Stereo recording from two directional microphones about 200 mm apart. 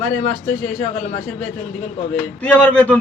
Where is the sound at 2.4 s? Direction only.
5° left (ahead or behind).